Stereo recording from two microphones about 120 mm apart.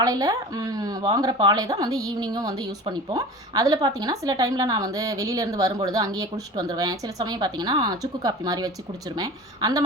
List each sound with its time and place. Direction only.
0.0 s a woman's voice: 30° right (ahead or behind)